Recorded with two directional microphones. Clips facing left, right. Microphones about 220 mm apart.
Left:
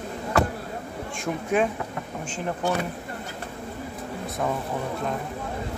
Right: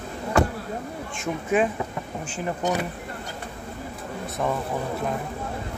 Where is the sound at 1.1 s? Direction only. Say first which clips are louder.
Right 1 dB; 5° right (ahead or behind).